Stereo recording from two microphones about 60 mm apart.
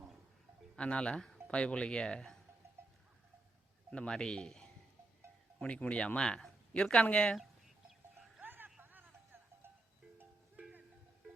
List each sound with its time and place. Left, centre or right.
0.8 s speech: centre
3.9 s speech: centre
8.4 s music: right
8.8 s a sound: right
10.6 s music: right